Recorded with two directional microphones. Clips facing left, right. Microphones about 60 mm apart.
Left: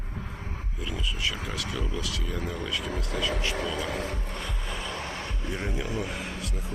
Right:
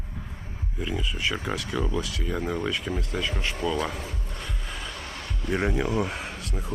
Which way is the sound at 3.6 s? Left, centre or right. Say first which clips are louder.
Right 5 dB; right.